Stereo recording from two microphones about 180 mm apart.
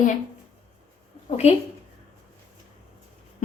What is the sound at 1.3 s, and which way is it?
Speech, 40° left (ahead or behind).